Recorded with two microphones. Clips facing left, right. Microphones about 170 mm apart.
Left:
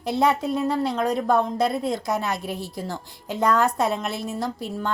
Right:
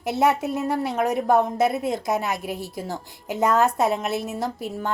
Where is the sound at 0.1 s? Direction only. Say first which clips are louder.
Even; 5° right (ahead or behind).